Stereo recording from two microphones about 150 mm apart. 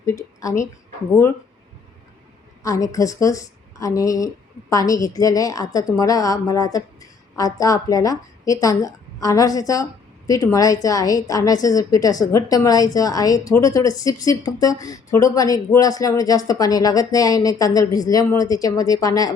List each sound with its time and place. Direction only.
0.0 s a woman's voice: 20° left (ahead or behind)
2.6 s a woman's voice: 20° left (ahead or behind)